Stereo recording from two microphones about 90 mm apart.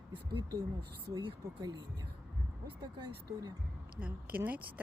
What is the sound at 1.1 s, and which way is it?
Speech, 55° right (ahead or behind).